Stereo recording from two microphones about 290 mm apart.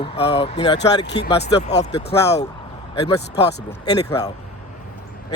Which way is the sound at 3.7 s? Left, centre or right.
Centre.